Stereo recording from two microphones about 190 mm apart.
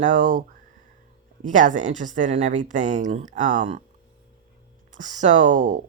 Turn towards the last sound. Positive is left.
turn(degrees=-40)  # may be behind; listen again after turning